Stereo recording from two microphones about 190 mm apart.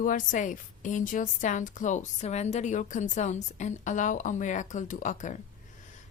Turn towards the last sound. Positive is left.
turn(degrees=40)  # may be behind; listen again after turning